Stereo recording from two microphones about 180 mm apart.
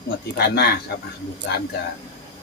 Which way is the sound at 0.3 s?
65° left (ahead or behind).